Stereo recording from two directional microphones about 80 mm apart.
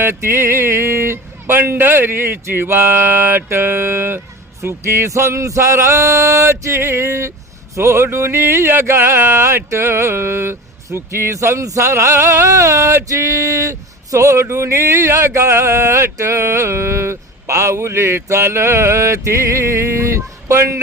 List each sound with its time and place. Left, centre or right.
0.0 s speech: right